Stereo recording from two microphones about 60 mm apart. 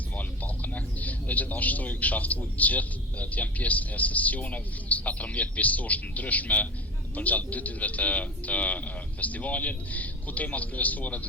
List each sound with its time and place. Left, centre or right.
0.2 s a man's voice: left